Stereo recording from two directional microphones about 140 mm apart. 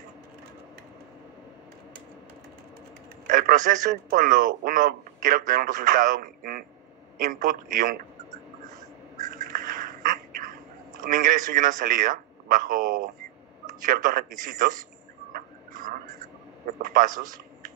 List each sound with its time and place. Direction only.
3.3 s a man's voice: 80° right
7.2 s a sound: 75° right (ahead or behind)
9.4 s duck: 70° right (ahead or behind)
13.8 s a man's voice: 75° right (ahead or behind)
15.3 s a sound: 75° right (ahead or behind)
16.8 s a man's voice: 70° right (ahead or behind)